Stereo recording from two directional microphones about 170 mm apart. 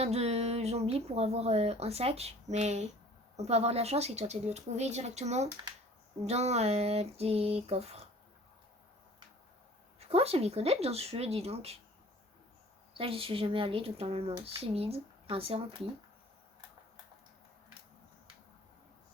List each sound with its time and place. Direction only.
0.0 s speech: 40° right (ahead or behind)
10.0 s speech: 35° right (ahead or behind)
13.0 s speech: 30° right (ahead or behind)